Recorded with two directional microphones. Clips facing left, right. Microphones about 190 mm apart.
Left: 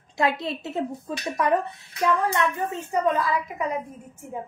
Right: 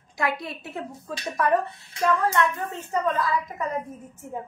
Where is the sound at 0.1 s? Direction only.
25° left (ahead or behind).